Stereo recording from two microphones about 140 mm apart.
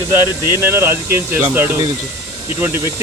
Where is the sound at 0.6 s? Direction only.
15° right (ahead or behind).